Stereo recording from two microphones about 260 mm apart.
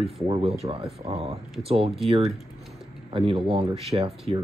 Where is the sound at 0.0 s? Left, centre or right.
Right.